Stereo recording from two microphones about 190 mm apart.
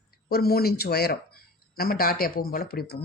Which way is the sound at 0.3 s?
55° left (ahead or behind).